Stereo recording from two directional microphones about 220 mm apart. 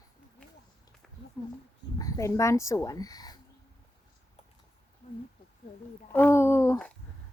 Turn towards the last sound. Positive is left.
turn(degrees=10)  # may be behind; listen again after turning